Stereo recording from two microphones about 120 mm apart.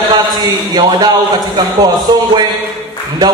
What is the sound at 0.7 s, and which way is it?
Speech, 35° right (ahead or behind).